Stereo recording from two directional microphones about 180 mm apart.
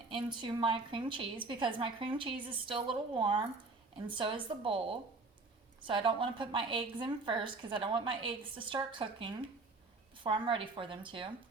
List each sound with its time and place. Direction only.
0.1 s a woman's voice: 25° right (ahead or behind)